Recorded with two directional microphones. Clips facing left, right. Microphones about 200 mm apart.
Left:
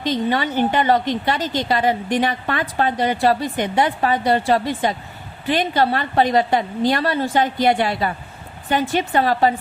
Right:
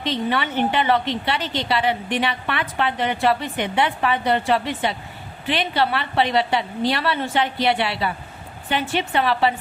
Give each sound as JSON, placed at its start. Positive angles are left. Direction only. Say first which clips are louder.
{"t": 0.0, "sound": "a woman's voice", "louder": "left 3 dB", "side_deg": 40}